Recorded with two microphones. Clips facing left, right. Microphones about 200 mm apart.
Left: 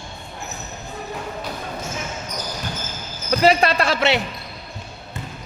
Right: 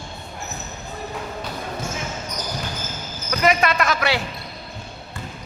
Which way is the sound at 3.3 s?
30° left (ahead or behind).